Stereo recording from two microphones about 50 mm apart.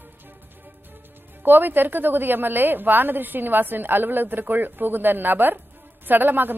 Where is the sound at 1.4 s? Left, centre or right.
Right.